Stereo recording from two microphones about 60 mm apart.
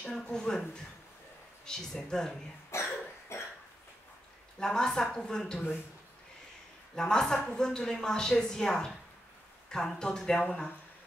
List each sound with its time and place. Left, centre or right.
0.2 s speech: centre
1.7 s speech: centre
2.7 s cough: left
4.6 s speech: centre
7.0 s speech: centre